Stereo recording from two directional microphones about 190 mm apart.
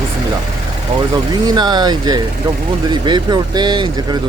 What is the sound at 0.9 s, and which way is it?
Speech, 30° right (ahead or behind).